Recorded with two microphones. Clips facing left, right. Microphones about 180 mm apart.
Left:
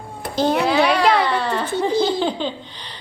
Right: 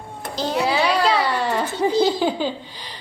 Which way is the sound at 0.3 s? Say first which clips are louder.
Left 5 dB; 55° left (ahead or behind).